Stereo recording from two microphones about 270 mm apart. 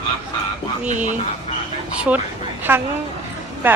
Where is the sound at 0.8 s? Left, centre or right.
Right.